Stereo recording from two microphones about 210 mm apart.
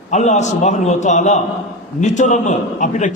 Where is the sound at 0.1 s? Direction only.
35° left (ahead or behind).